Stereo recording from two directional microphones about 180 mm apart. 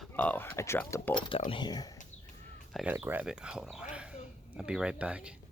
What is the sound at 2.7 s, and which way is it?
Speech, 5° right (ahead or behind).